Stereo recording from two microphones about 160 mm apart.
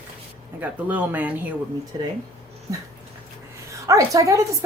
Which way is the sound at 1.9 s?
30° right (ahead or behind).